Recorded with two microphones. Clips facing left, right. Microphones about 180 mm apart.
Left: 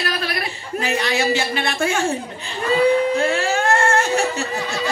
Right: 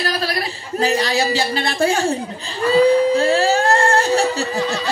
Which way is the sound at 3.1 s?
35° right (ahead or behind).